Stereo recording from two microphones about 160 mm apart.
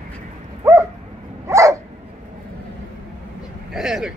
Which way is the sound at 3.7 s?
5° right (ahead or behind).